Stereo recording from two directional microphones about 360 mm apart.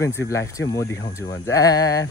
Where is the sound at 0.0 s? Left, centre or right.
Centre.